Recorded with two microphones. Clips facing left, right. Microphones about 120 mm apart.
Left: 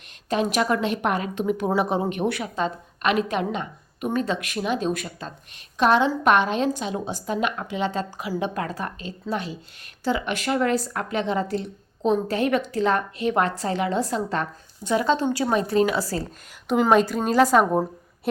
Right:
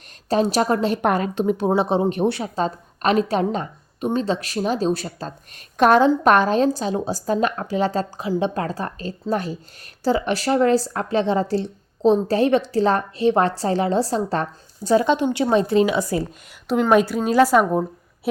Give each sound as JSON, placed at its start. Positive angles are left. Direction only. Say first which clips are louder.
{"t": 0.3, "sound": "a woman's voice", "louder": "right 4 dB", "side_deg": -35}
{"t": 5.7, "sound": "a woman's voice", "louder": "right 5 dB", "side_deg": -45}
{"t": 15.0, "sound": "speech", "louder": "right 3 dB", "side_deg": -20}
{"t": 16.6, "sound": "a woman's voice", "louder": "right 2 dB", "side_deg": 0}